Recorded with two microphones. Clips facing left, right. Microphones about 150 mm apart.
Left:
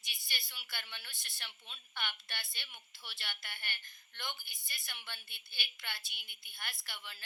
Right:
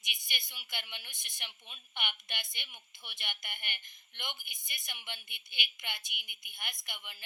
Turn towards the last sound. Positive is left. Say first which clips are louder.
# right 1 dB
turn(degrees=-15)  # may be behind; listen again after turning